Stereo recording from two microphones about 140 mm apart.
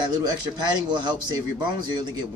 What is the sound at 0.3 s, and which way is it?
Speech, 30° right (ahead or behind).